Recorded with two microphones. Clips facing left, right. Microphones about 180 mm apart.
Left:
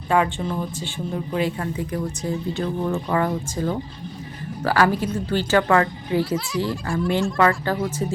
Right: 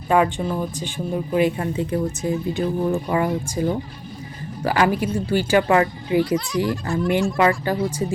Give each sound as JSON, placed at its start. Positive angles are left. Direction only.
{"t": 0.1, "sound": "speech", "side_deg": -15}
{"t": 6.2, "sound": "speech", "side_deg": 5}
{"t": 7.1, "sound": "speech", "side_deg": -15}